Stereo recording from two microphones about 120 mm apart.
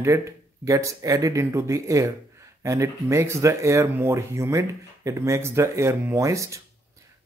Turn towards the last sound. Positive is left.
turn(degrees=-25)  # may be behind; listen again after turning